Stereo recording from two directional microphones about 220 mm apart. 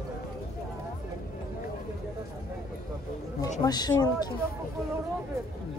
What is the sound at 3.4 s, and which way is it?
Speech, 20° left (ahead or behind).